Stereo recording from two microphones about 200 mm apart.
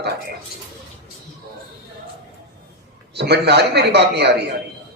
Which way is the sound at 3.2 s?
55° right (ahead or behind).